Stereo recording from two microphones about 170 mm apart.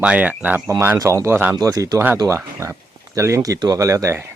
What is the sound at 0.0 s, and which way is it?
Speech, 10° right (ahead or behind).